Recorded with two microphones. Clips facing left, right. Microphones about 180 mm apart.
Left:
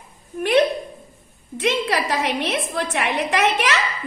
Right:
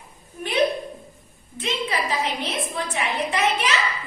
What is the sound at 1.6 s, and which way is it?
A woman's voice, 75° left (ahead or behind).